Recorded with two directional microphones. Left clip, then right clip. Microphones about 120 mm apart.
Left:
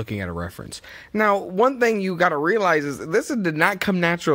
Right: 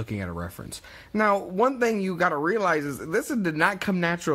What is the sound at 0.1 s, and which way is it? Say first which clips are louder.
Speech: left 3 dB; 40° left (ahead or behind).